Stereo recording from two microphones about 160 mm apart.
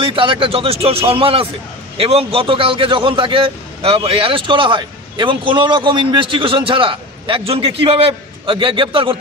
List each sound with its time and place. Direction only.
0.0 s a man's voice: 30° right (ahead or behind)